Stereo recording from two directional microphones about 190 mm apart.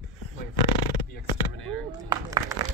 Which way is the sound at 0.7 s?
25° left (ahead or behind).